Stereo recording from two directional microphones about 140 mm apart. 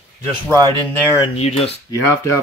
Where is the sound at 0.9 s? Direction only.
15° left (ahead or behind).